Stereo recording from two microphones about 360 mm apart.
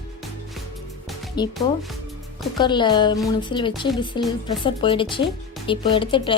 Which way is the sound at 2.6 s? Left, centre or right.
Centre.